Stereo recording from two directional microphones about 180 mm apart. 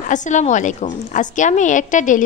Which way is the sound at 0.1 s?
45° left (ahead or behind).